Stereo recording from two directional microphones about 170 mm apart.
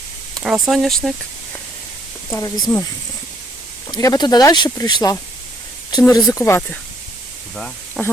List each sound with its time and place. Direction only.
0.4 s speech: centre (ahead or behind)
2.3 s speech: 20° left (ahead or behind)
3.9 s speech: 25° left (ahead or behind)
7.5 s a sound: centre (ahead or behind)